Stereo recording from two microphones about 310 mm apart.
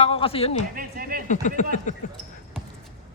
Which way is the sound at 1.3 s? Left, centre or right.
Left.